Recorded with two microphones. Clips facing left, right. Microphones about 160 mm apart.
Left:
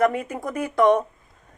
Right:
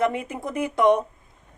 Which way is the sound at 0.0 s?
20° right (ahead or behind).